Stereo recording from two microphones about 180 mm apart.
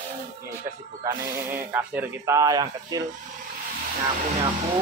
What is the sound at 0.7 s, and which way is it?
Speech, 15° right (ahead or behind).